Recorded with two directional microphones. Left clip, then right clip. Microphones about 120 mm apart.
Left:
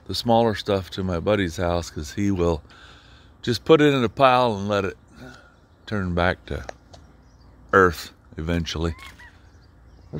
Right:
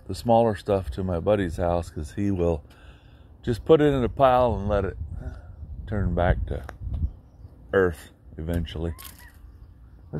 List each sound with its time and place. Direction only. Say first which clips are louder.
0.1 s speech: left 1 dB; 30° left (ahead or behind); by 5.3 s 60° left (ahead or behind)
5.9 s speech: left 3 dB; 85° left
7.7 s speech: left 5 dB; 75° left (ahead or behind)